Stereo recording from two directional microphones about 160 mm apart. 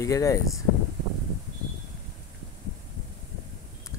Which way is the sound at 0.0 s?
20° left (ahead or behind).